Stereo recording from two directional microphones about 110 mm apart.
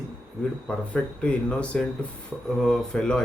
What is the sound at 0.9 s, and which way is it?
Speech, 10° left (ahead or behind).